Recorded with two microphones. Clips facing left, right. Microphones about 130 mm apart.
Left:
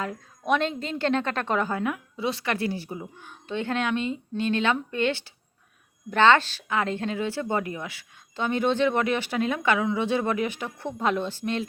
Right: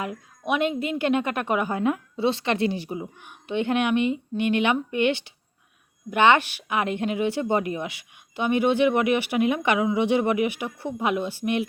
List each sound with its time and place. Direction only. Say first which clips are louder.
0.0 s speech: right 1 dB; 10° right (ahead or behind)
1.8 s speech: right 5 dB; 30° right (ahead or behind)